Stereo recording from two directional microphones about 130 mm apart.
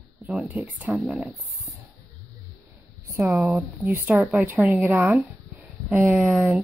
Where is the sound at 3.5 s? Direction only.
15° right (ahead or behind).